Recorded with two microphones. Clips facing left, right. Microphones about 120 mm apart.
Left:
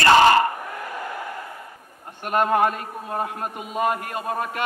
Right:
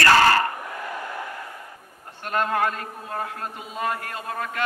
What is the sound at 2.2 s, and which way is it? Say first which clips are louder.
A man's voice: left 4 dB; 15° left (ahead or behind).